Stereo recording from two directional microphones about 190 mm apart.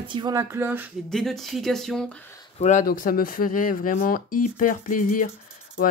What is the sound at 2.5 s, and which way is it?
Speech, 40° left (ahead or behind).